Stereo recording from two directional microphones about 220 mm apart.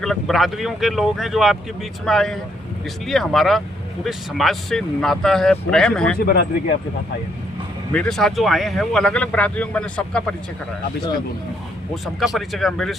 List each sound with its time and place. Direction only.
0.0 s speech: centre (ahead or behind)
6.1 s speech: 45° left (ahead or behind)
7.9 s speech: 5° left (ahead or behind)
12.0 s speech: centre (ahead or behind)